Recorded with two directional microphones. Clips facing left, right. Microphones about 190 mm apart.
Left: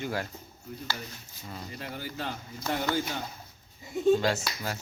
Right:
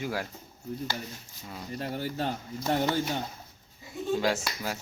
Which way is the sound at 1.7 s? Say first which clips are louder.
Right 7 dB; 35° right (ahead or behind).